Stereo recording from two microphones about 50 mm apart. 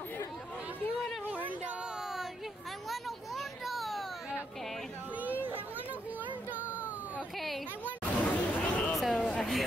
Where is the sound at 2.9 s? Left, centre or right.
Centre.